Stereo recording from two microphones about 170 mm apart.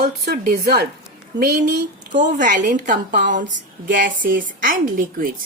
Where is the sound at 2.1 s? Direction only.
50° right (ahead or behind).